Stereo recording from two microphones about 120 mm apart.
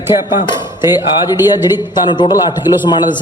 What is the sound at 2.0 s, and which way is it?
Speech, 40° left (ahead or behind).